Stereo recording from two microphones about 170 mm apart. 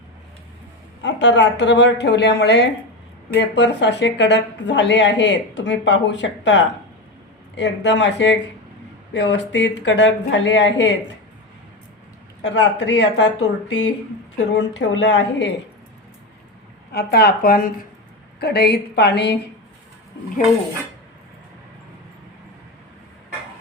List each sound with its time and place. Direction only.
1.0 s a woman's voice: 90° left
12.4 s a woman's voice: 90° left
16.9 s speech: 70° left (ahead or behind)